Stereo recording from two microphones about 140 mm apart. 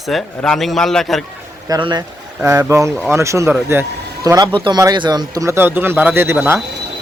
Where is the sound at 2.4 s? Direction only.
15° right (ahead or behind).